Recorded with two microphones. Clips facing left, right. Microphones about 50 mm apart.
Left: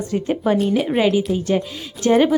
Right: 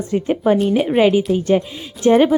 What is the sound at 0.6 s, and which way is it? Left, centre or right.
Speech, centre.